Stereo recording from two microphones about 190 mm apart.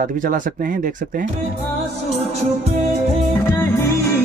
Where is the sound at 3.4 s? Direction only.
10° left (ahead or behind).